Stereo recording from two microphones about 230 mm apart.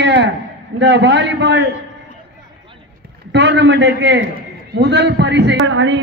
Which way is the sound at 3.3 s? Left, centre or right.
Right.